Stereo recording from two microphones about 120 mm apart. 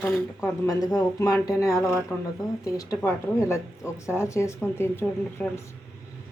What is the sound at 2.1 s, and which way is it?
Speech, 10° left (ahead or behind).